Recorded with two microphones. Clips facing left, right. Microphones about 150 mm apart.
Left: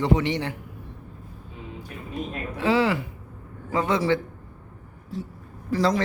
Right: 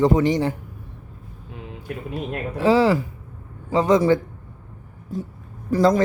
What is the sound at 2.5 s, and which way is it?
A woman's voice, 35° right (ahead or behind).